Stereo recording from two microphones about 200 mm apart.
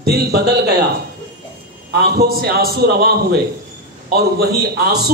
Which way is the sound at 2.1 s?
50° right (ahead or behind).